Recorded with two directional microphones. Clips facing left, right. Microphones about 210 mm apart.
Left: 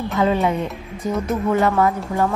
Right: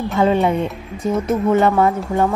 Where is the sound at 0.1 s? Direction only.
30° right (ahead or behind).